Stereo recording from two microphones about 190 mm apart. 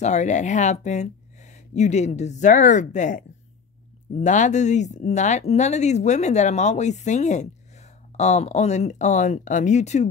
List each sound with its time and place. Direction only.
0.0 s speech: 40° left (ahead or behind)